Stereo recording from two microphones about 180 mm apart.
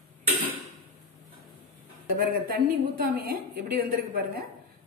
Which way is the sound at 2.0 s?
55° right (ahead or behind).